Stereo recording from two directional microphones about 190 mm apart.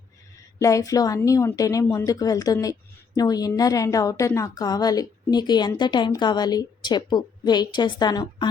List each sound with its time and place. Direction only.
0.6 s a woman's voice: 15° left (ahead or behind)